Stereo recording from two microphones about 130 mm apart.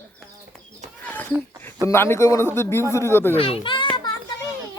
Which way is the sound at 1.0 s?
15° left (ahead or behind).